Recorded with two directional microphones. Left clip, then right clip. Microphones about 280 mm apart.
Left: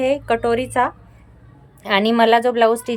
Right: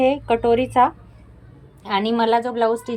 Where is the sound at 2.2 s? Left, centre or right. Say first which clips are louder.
Left 4 dB; left.